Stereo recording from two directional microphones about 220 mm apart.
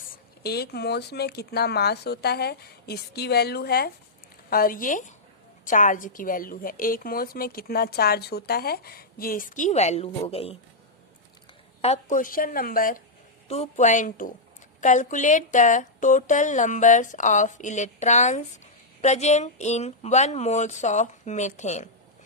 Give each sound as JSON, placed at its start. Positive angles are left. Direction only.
{"t": 0.1, "sound": "speech", "side_deg": 45}
{"t": 11.8, "sound": "speech", "side_deg": 30}